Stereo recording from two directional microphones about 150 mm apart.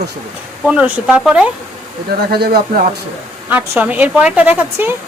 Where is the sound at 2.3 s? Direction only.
90° right.